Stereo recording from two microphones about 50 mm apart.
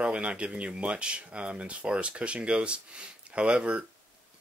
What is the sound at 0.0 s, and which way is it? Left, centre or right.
Speech, right.